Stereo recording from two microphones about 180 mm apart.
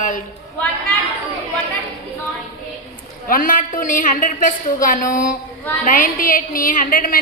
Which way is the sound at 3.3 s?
50° left (ahead or behind).